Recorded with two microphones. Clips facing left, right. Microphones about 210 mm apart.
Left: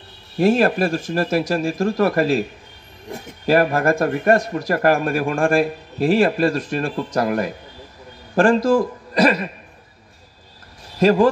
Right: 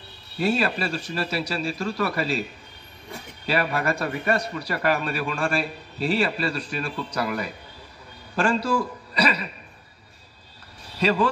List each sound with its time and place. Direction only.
0.4 s speech: 50° left (ahead or behind)
11.0 s speech: 45° left (ahead or behind)